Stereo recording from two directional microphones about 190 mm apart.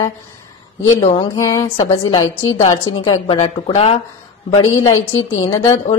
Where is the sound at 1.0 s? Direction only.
30° left (ahead or behind).